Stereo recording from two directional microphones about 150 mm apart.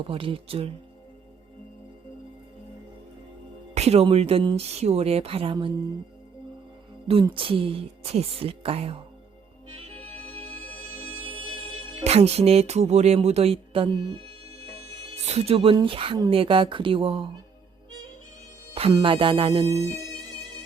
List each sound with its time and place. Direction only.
0.0 s speech: 35° right (ahead or behind)
3.8 s speech: 45° right (ahead or behind)
7.1 s speech: 35° right (ahead or behind)
10.9 s music: 40° right (ahead or behind)
15.3 s speech: 40° right (ahead or behind)
18.7 s music: 40° right (ahead or behind)
19.0 s speech: 35° right (ahead or behind)
19.6 s speech: 20° right (ahead or behind)